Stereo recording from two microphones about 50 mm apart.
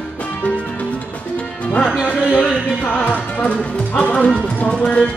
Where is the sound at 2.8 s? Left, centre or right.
Left.